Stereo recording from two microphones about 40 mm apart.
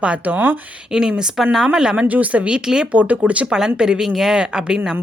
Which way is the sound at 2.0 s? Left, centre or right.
Right.